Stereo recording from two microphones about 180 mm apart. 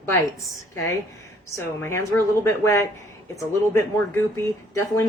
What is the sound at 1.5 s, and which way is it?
Speech, 15° left (ahead or behind).